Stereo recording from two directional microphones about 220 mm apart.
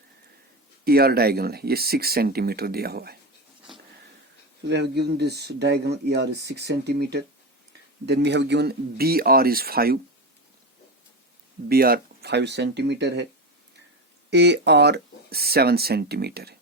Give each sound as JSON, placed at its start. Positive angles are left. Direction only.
{"t": 0.9, "sound": "speech", "side_deg": -45}
{"t": 4.7, "sound": "speech", "side_deg": -50}
{"t": 11.7, "sound": "speech", "side_deg": -45}
{"t": 14.3, "sound": "speech", "side_deg": -50}